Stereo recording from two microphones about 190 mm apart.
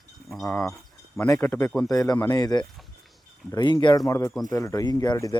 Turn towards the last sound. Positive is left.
turn(degrees=20)  # may be behind; listen again after turning